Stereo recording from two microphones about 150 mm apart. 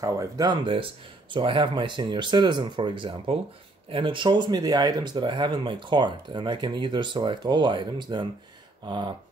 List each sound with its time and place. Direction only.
0.0 s speech: 25° right (ahead or behind)